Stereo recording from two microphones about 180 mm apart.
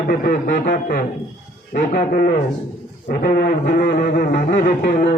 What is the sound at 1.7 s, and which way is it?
Speech, 40° left (ahead or behind).